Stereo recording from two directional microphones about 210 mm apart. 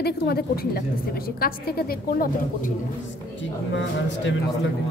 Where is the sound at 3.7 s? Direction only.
60° left (ahead or behind).